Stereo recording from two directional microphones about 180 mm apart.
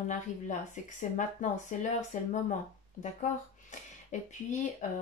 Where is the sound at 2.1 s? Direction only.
45° left (ahead or behind).